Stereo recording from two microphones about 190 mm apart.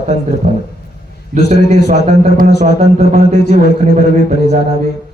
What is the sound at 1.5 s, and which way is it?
Speech, 60° left (ahead or behind).